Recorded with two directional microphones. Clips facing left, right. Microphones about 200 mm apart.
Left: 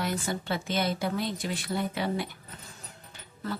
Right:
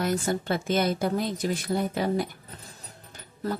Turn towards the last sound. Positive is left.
turn(degrees=-40)  # may be behind; listen again after turning